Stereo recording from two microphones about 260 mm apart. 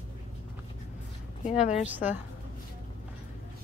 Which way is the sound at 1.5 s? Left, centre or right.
Left.